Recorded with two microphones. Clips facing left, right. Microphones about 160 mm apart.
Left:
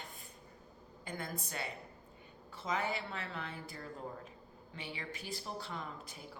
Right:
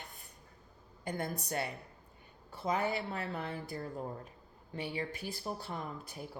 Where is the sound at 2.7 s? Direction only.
40° right (ahead or behind).